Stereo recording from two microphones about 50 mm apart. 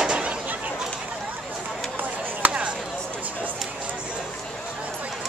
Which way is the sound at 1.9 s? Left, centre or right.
Right.